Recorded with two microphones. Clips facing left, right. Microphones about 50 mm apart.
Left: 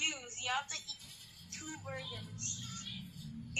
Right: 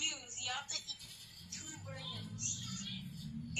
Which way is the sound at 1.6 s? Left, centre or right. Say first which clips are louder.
Left 5 dB; left.